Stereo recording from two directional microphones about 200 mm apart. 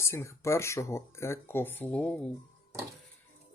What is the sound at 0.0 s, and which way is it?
Speech, 15° left (ahead or behind).